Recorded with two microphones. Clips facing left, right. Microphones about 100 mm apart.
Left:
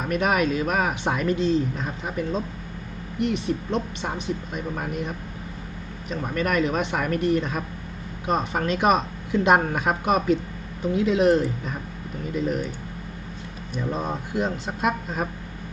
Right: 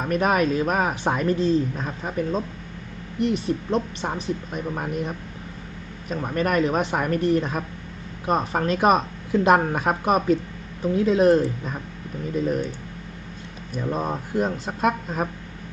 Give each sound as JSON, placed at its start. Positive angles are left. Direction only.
{"t": 0.0, "sound": "speech", "side_deg": -35}
{"t": 13.9, "sound": "speech", "side_deg": -45}